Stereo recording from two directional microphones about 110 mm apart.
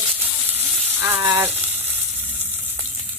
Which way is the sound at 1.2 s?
30° right (ahead or behind).